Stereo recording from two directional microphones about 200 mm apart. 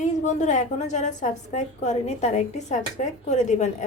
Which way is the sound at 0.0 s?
35° left (ahead or behind).